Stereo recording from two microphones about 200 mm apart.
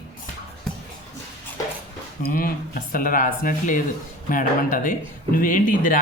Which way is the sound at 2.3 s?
45° left (ahead or behind).